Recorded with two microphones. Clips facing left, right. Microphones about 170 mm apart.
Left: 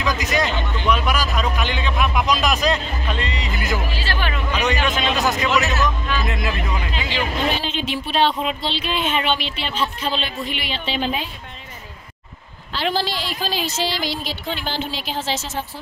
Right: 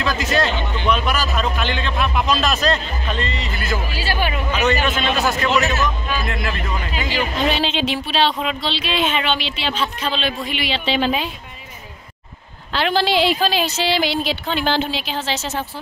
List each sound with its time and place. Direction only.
0.0 s speech: 15° left (ahead or behind)
3.9 s speech: 10° right (ahead or behind)
4.8 s speech: 15° left (ahead or behind)
6.9 s speech: 10° right (ahead or behind)
7.5 s a woman's voice: 85° right
12.7 s a woman's voice: 65° right (ahead or behind)